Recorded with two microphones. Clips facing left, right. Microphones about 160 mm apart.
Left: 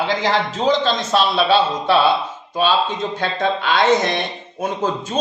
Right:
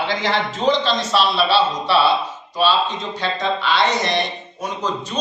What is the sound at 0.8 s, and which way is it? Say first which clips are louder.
Speech: left 1 dB; 50° left (ahead or behind).